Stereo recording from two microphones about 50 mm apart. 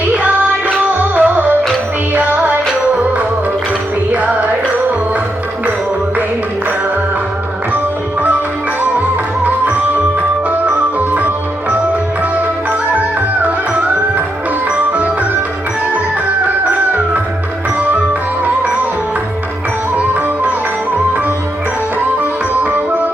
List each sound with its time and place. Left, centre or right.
1.1 s music: right
4.1 s music: right
9.0 s music: right
22.2 s music: right